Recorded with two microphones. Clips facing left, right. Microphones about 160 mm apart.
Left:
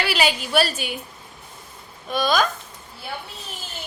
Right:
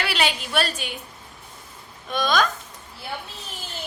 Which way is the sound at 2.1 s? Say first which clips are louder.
Left 1 dB; 5° left (ahead or behind).